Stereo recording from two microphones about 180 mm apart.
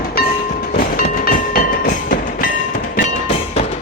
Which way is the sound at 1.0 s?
55° left (ahead or behind).